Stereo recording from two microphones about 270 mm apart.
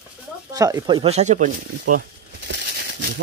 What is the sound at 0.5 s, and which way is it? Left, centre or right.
Speech, centre.